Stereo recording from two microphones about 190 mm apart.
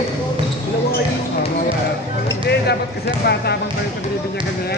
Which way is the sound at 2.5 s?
60° left (ahead or behind).